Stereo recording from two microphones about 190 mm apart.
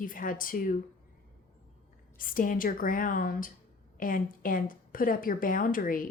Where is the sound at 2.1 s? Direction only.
45° left (ahead or behind).